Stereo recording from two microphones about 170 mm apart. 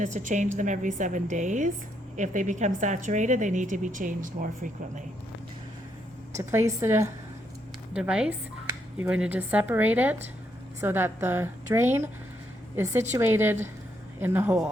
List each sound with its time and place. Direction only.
0.0 s a woman's voice: 50° right (ahead or behind)
6.3 s a woman's voice: 15° right (ahead or behind)